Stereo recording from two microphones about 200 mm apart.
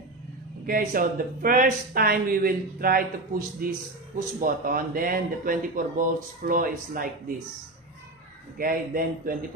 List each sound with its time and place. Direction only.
0.7 s speech: 45° right (ahead or behind)
8.5 s speech: 45° right (ahead or behind)